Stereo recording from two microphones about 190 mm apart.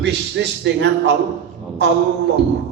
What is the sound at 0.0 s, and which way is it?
Speech, 65° right (ahead or behind).